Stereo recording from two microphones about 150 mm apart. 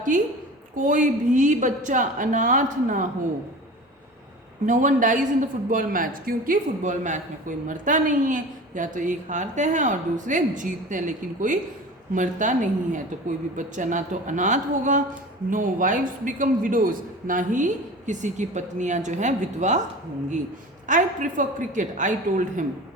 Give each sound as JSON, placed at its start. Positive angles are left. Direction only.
{"t": 0.1, "sound": "a woman's voice", "side_deg": -60}
{"t": 4.6, "sound": "a woman's voice", "side_deg": -60}
{"t": 20.8, "sound": "a woman's voice", "side_deg": -60}